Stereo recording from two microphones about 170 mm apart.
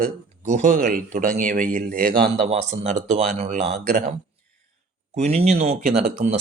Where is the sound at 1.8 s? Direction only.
65° right (ahead or behind).